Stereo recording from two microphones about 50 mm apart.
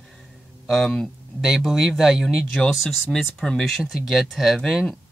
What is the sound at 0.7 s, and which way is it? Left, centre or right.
Speech, centre.